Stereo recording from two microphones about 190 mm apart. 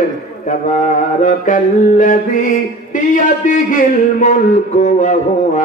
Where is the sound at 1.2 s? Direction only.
45° left (ahead or behind).